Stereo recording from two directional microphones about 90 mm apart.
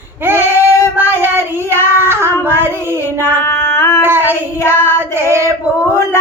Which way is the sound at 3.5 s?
30° left (ahead or behind).